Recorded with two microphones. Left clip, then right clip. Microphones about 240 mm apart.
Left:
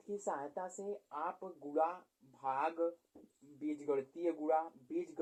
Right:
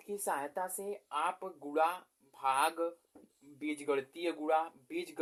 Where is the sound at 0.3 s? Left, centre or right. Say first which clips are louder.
Right 6 dB; right.